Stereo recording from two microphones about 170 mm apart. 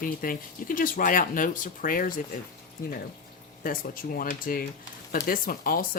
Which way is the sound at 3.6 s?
55° left (ahead or behind).